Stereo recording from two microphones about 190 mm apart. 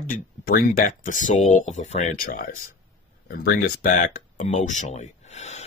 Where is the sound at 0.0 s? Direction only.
50° left (ahead or behind).